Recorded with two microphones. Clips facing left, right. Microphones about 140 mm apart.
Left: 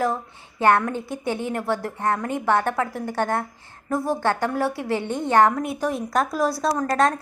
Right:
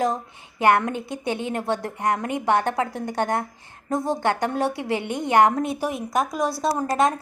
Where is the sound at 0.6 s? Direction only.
20° right (ahead or behind).